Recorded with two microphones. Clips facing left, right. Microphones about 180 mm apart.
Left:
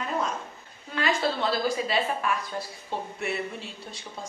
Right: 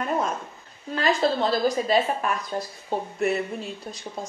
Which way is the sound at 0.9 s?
40° right (ahead or behind).